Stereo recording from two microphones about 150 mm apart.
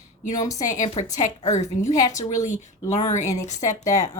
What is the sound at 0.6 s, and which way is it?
Speech, 55° left (ahead or behind).